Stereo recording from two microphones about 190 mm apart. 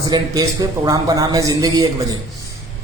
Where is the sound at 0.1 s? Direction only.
20° right (ahead or behind).